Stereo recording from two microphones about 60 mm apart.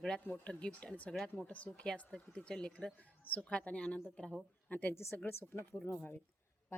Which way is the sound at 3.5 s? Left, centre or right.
Left.